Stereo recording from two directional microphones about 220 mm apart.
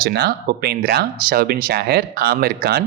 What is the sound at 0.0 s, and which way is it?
Speech, 45° right (ahead or behind).